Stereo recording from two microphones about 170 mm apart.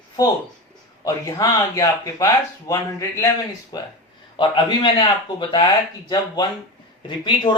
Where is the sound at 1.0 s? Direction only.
20° left (ahead or behind).